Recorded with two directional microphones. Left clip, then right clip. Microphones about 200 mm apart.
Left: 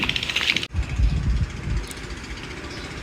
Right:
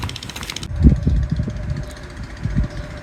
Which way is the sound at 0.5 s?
45° right (ahead or behind).